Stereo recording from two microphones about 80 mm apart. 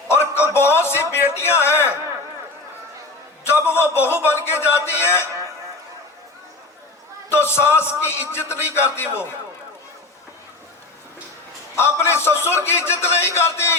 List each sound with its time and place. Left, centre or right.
0.1 s a sound: left
1.1 s speech: left
3.4 s a man's voice: left
7.3 s a man's voice: left
11.8 s a man's voice: left